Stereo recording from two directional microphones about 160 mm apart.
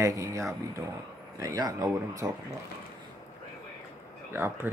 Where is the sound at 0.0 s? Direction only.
20° right (ahead or behind).